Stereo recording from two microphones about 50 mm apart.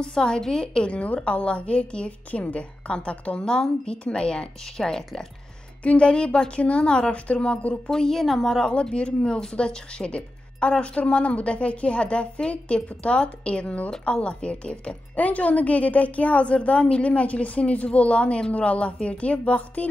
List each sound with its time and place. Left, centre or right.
0.0 s speech: centre
7.9 s a woman's voice: centre
8.6 s speech: centre